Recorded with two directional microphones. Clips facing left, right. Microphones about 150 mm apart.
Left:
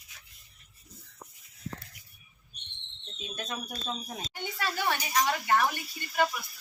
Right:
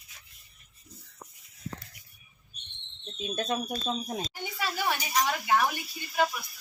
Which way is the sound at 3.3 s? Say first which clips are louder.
Right 7 dB; 25° right (ahead or behind).